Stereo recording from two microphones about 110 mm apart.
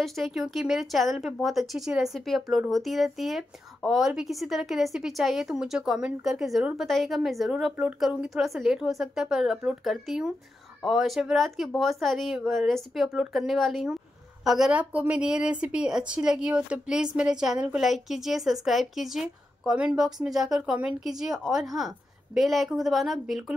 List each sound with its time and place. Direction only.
0.0 s a woman's voice: centre (ahead or behind)